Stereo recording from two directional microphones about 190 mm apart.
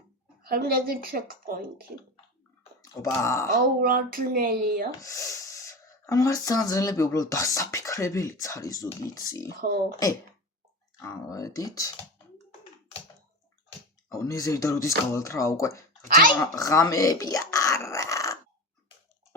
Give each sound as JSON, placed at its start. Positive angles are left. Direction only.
{"t": 0.4, "sound": "speech", "side_deg": -50}
{"t": 2.8, "sound": "speech", "side_deg": 15}
{"t": 3.5, "sound": "speech", "side_deg": -50}
{"t": 5.0, "sound": "speech", "side_deg": 15}
{"t": 11.0, "sound": "speech", "side_deg": 20}
{"t": 14.1, "sound": "speech", "side_deg": 15}
{"t": 16.0, "sound": "speech", "side_deg": -50}
{"t": 16.4, "sound": "a sound", "side_deg": 15}